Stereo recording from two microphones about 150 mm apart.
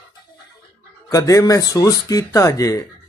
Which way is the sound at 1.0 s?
20° left (ahead or behind).